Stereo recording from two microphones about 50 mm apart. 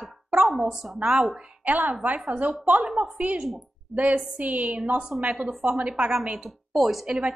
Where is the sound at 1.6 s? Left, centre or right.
Right.